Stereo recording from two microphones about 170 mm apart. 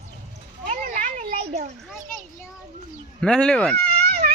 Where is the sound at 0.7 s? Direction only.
50° right (ahead or behind).